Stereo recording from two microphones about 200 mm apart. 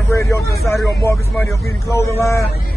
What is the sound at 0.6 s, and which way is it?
Speech, centre (ahead or behind).